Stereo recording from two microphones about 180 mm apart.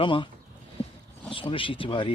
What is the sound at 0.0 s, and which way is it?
Speech, 25° left (ahead or behind).